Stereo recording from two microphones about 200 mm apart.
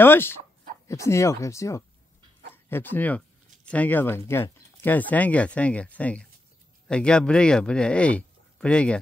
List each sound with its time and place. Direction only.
0.0 s speech: 10° left (ahead or behind)